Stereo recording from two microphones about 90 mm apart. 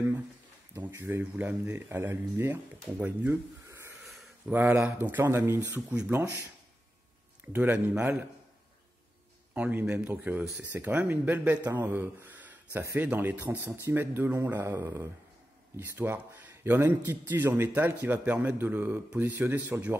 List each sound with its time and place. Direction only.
1.0 s a man's voice: 20° right (ahead or behind)
3.6 s snort: 30° right (ahead or behind)
4.0 s a sound: centre (ahead or behind)
4.5 s a man's voice: 20° right (ahead or behind)
5.8 s speech: 10° right (ahead or behind)
6.0 s a man's voice: 30° right (ahead or behind)
7.4 s a man's voice: 20° right (ahead or behind)
9.5 s a man's voice: 20° right (ahead or behind)